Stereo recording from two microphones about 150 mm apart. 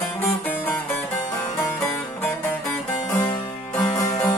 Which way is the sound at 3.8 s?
30° left (ahead or behind).